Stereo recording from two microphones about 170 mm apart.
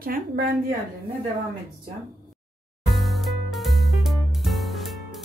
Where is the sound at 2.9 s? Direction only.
Centre (ahead or behind).